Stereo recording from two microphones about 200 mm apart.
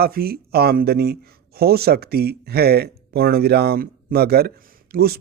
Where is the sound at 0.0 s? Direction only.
50° right (ahead or behind).